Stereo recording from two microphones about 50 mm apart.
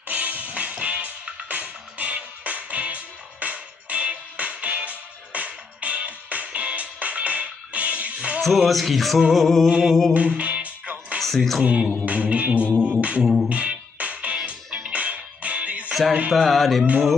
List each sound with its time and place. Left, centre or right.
0.1 s music: right
8.4 s music: centre
10.1 s music: right
11.1 s music: centre
11.6 s music: right
13.2 s music: centre
13.5 s music: right
15.9 s music: centre
16.3 s music: centre